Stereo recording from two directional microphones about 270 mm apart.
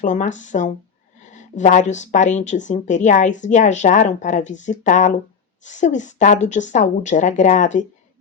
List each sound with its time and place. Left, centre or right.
0.0 s speech: left